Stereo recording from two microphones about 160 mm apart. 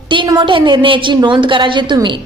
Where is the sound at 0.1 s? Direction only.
30° right (ahead or behind).